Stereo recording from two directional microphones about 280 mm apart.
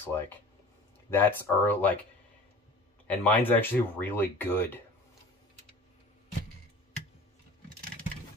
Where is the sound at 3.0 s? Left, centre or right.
Centre.